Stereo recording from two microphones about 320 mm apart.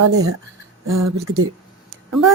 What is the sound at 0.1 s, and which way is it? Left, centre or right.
Speech, right.